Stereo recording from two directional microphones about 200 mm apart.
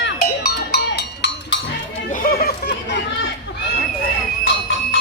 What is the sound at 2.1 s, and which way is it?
Chatter, 45° left (ahead or behind).